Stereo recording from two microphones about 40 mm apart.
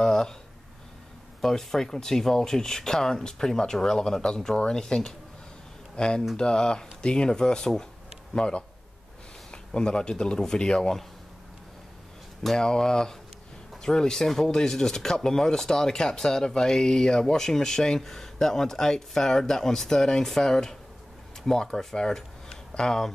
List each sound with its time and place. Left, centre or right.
0.0 s speech: centre
1.4 s speech: centre
9.8 s speech: left
12.5 s speech: centre